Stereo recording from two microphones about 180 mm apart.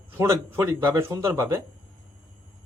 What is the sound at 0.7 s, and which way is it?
Speech, 20° right (ahead or behind).